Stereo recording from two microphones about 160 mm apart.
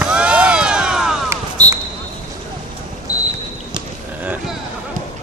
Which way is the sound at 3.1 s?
25° left (ahead or behind).